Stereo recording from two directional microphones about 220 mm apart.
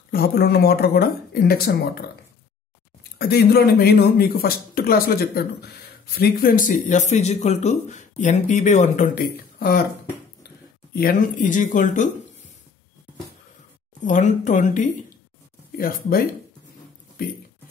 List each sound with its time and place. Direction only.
0.1 s speech: 45° left (ahead or behind)
11.0 s speech: 40° left (ahead or behind)
14.0 s speech: 35° left (ahead or behind)